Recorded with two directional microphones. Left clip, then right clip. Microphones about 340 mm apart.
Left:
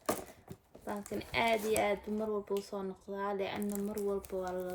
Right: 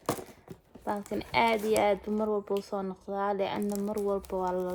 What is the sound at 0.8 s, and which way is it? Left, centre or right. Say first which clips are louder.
Speech: right 7 dB; centre.